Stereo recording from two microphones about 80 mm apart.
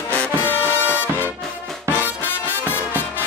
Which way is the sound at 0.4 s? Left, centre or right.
Left.